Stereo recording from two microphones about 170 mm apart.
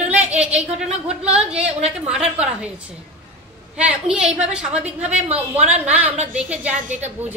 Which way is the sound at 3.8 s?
5° right (ahead or behind).